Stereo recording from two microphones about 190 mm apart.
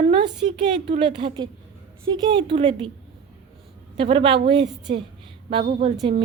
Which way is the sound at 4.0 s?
30° right (ahead or behind).